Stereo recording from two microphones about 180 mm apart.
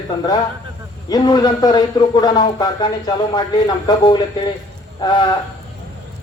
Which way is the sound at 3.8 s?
25° left (ahead or behind).